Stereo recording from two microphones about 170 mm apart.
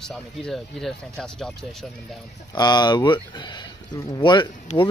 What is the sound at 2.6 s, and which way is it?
Speech, 25° left (ahead or behind).